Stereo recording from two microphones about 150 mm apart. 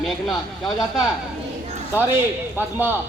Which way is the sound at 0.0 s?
Centre (ahead or behind).